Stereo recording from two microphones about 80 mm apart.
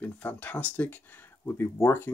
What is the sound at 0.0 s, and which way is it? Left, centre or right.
Speech, left.